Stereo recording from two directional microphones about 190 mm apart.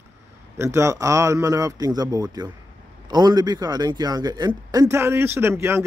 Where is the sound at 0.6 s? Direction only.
15° right (ahead or behind).